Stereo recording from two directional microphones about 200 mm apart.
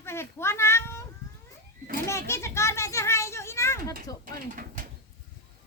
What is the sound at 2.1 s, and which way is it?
A child's voice, 15° left (ahead or behind).